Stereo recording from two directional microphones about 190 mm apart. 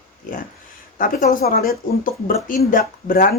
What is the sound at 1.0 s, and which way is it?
Speech, 45° left (ahead or behind).